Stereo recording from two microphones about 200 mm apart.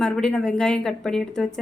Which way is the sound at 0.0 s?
5° left (ahead or behind).